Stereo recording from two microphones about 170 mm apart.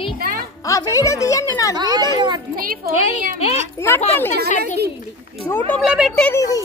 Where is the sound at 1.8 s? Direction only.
25° right (ahead or behind).